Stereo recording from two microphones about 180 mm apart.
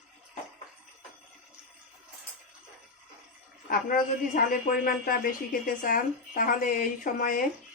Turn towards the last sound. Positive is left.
turn(degrees=50)  # may be behind; listen again after turning